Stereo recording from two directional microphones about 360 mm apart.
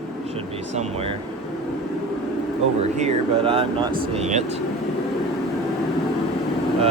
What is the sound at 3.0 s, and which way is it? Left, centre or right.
Speech, centre.